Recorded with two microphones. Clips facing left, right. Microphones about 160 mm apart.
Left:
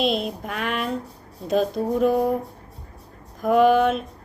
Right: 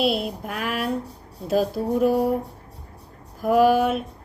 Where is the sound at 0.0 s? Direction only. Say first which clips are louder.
Even; 5° right (ahead or behind).